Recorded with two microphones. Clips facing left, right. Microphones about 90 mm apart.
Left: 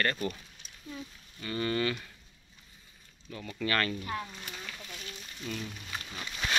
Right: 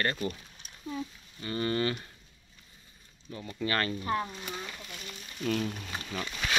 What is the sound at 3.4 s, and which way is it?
Speech, 25° right (ahead or behind).